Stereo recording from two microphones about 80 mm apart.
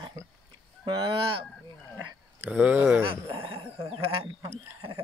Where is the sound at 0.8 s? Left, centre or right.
Right.